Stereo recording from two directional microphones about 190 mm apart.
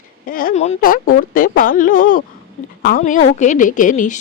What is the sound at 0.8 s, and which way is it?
Speech, 50° left (ahead or behind).